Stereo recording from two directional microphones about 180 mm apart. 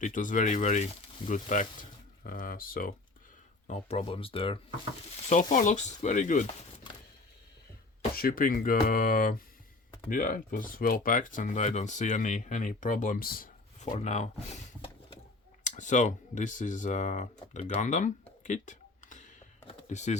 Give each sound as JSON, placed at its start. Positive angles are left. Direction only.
{"t": 0.0, "sound": "speech", "side_deg": 45}
{"t": 3.7, "sound": "speech", "side_deg": 35}
{"t": 5.3, "sound": "speech", "side_deg": 45}
{"t": 8.1, "sound": "speech", "side_deg": 55}
{"t": 19.6, "sound": "a sound", "side_deg": 40}